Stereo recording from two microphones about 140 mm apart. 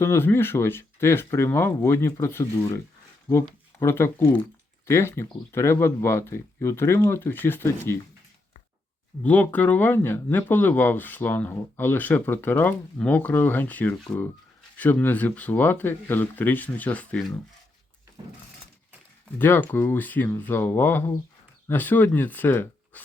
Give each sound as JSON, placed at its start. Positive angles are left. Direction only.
{"t": 0.0, "sound": "speech", "side_deg": 15}
{"t": 9.2, "sound": "speech", "side_deg": 10}
{"t": 19.4, "sound": "speech", "side_deg": 15}